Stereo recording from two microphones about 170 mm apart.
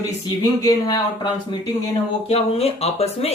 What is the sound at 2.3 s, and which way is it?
Speech, 35° left (ahead or behind).